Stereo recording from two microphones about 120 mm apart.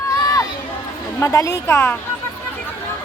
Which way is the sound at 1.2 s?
25° left (ahead or behind).